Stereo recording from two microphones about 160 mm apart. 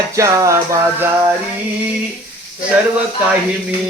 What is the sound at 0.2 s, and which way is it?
Music, 20° right (ahead or behind).